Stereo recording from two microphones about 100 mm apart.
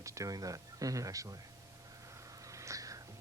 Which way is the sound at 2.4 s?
30° right (ahead or behind).